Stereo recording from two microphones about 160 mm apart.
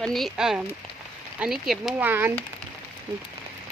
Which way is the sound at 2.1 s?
15° right (ahead or behind).